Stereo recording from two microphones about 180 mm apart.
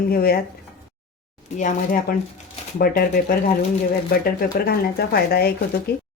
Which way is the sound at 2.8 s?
55° left (ahead or behind).